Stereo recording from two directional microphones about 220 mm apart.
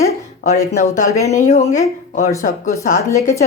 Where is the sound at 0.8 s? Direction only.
35° left (ahead or behind).